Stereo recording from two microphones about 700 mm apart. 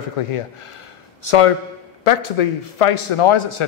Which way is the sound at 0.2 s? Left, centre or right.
Left.